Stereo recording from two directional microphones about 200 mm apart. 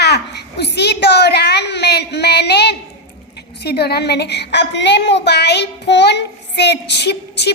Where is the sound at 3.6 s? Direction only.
55° left (ahead or behind).